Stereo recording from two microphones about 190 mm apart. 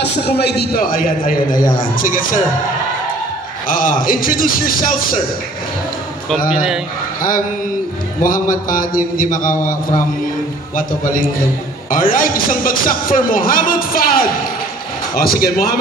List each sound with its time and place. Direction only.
0.4 s a man's voice: 60° left (ahead or behind)
3.6 s a man's voice: 45° left (ahead or behind)
6.5 s speech: 5° right (ahead or behind)
7.2 s mantra: 45° left (ahead or behind)
8.2 s a man's voice: 45° left (ahead or behind)